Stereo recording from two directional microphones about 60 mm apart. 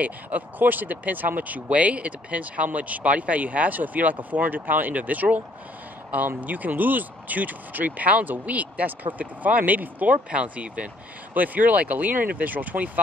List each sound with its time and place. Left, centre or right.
0.0 s speech: right